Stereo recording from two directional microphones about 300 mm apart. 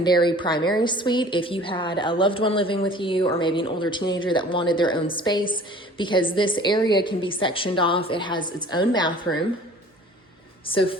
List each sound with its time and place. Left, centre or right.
0.0 s a woman's voice: centre
10.7 s a woman's voice: centre